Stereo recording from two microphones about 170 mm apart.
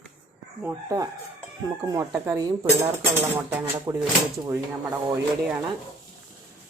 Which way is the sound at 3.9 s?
20° right (ahead or behind).